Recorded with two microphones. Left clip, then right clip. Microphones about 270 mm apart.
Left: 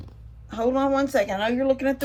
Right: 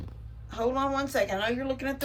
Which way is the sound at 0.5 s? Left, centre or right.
Left.